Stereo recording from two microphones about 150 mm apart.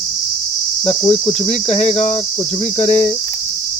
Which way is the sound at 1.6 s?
45° left (ahead or behind).